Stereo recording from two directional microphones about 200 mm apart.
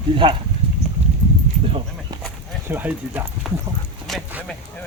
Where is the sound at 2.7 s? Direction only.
10° right (ahead or behind).